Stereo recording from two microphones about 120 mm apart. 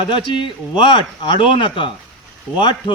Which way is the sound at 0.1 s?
45° left (ahead or behind).